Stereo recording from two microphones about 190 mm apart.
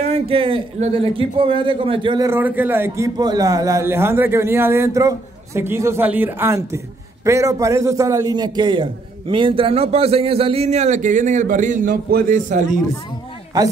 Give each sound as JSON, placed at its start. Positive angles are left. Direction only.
{"t": 0.0, "sound": "a man's voice", "side_deg": -30}
{"t": 13.5, "sound": "a man's voice", "side_deg": -20}